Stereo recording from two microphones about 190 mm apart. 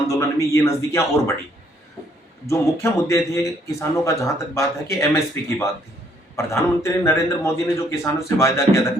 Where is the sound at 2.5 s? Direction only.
15° left (ahead or behind).